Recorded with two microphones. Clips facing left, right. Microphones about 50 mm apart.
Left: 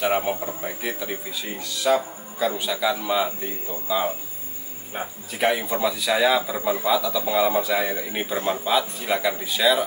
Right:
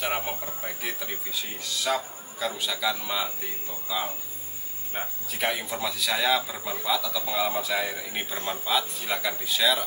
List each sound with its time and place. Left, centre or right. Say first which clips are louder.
0.0 s speech: left 7 dB; centre